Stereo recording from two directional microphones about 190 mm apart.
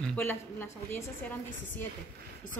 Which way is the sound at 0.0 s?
10° left (ahead or behind).